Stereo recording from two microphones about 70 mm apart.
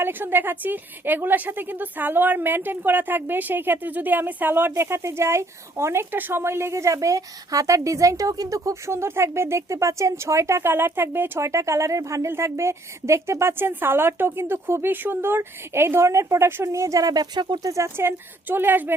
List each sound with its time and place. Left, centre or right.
0.0 s a woman's voice: right
6.4 s a woman's voice: right
11.4 s a woman's voice: right
17.7 s a woman's voice: right